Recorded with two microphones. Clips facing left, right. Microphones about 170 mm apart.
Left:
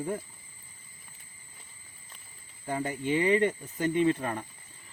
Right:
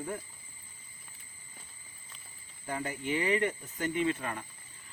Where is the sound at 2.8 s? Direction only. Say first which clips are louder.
Left 5 dB; 25° left (ahead or behind).